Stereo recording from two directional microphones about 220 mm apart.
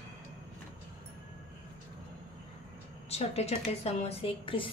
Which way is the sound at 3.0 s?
30° left (ahead or behind).